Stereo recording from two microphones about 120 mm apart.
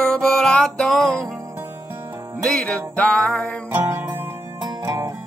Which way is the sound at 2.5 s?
10° left (ahead or behind).